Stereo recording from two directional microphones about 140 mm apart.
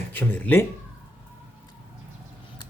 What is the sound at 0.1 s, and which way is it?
Speech, 15° left (ahead or behind).